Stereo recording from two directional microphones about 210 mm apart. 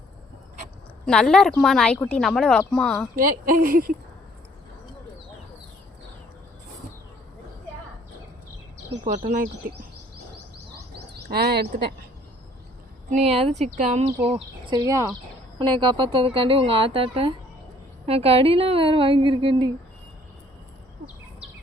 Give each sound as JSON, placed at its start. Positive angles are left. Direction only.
{"t": 1.0, "sound": "speech", "side_deg": 5}
{"t": 3.2, "sound": "speech", "side_deg": -40}
{"t": 9.0, "sound": "speech", "side_deg": -35}
{"t": 10.8, "sound": "bird", "side_deg": -50}
{"t": 13.1, "sound": "speech", "side_deg": -35}
{"t": 14.3, "sound": "a woman's voice", "side_deg": -25}